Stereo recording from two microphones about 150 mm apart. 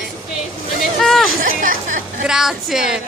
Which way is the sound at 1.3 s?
70° right (ahead or behind).